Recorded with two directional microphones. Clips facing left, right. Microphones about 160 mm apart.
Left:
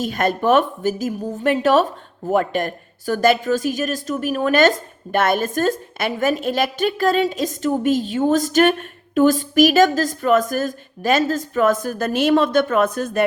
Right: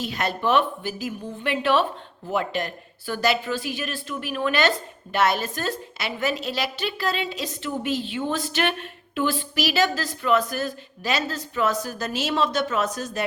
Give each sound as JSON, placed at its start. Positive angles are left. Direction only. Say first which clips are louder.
{"t": 0.0, "sound": "a woman's voice", "louder": "left 6 dB", "side_deg": 50}